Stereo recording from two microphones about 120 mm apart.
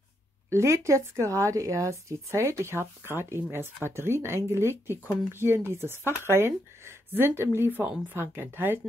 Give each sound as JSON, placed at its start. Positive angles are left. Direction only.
{"t": 0.5, "sound": "a woman's voice", "side_deg": -25}